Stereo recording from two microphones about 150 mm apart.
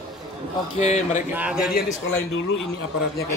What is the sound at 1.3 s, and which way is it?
Speech, 10° right (ahead or behind).